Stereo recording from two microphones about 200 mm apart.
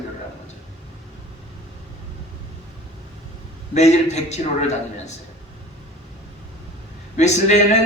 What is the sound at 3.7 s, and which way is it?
A woman's voice, 35° left (ahead or behind).